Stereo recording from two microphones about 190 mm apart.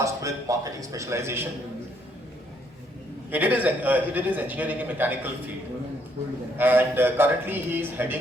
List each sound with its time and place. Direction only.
0.0 s a man's voice: 15° right (ahead or behind)
3.3 s a man's voice: 10° right (ahead or behind)
6.6 s a man's voice: 10° right (ahead or behind)